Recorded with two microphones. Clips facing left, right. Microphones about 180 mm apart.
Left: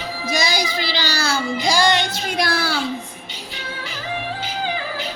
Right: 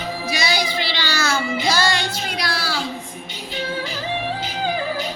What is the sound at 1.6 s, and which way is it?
Music, 15° left (ahead or behind).